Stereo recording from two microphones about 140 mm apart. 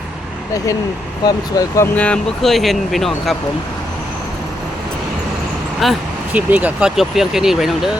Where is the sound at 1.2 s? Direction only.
25° left (ahead or behind).